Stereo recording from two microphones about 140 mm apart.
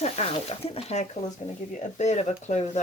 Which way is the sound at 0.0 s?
50° left (ahead or behind).